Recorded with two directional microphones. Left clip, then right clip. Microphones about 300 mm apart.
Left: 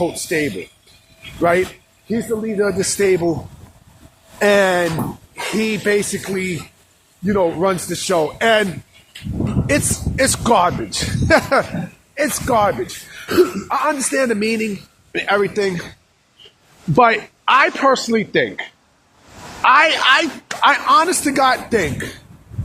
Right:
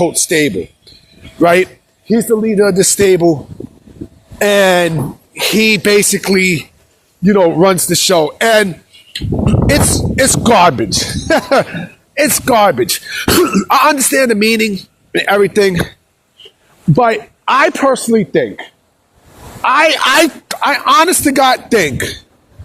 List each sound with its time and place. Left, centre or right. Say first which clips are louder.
0.0 s speech: right 7 dB; right
4.4 s speech: right 5 dB; right
12.1 s speech: right 6 dB; right
16.9 s speech: right 2 dB; right